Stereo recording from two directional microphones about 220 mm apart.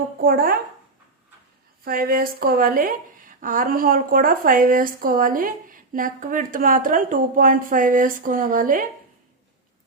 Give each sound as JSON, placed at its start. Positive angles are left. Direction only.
{"t": 0.2, "sound": "a woman's voice", "side_deg": -40}
{"t": 1.8, "sound": "a woman's voice", "side_deg": -40}